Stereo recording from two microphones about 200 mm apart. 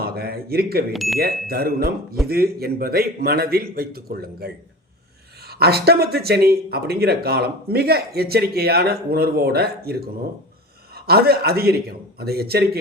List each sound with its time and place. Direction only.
0.0 s speech: 50° right (ahead or behind)
0.9 s speech: centre (ahead or behind)
1.2 s speech: 50° right (ahead or behind)